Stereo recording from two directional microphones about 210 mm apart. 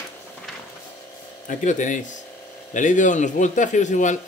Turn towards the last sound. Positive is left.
turn(degrees=35)  # may be behind; listen again after turning